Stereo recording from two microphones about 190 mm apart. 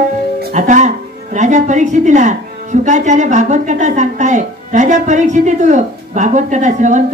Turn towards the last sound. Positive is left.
turn(degrees=-40)  # may be behind; listen again after turning